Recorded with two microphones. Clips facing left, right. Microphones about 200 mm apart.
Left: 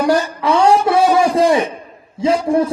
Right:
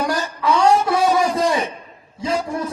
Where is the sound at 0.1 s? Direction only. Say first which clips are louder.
Left 5 dB; 30° left (ahead or behind).